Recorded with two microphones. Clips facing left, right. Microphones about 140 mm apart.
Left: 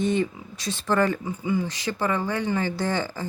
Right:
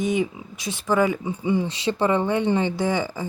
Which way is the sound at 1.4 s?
25° right (ahead or behind).